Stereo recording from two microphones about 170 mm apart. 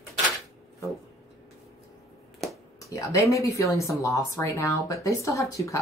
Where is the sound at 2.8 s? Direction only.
20° left (ahead or behind).